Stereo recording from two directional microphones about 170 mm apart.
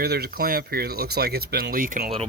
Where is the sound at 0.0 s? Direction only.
65° right (ahead or behind).